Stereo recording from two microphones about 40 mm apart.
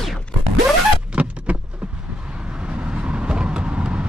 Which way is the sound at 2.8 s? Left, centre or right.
Right.